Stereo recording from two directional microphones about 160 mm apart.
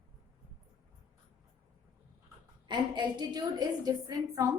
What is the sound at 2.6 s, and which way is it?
A woman's voice, 30° right (ahead or behind).